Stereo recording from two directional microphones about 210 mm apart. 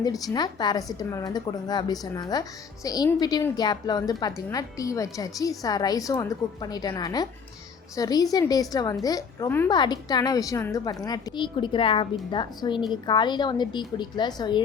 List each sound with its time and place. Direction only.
0.0 s a woman's voice: 20° left (ahead or behind)